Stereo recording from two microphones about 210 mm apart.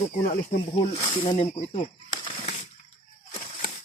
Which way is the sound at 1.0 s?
25° left (ahead or behind).